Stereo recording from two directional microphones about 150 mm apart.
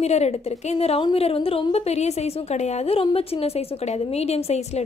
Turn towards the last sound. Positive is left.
turn(degrees=45)  # may be behind; listen again after turning